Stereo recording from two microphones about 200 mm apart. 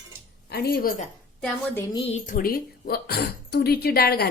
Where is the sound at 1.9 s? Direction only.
25° left (ahead or behind).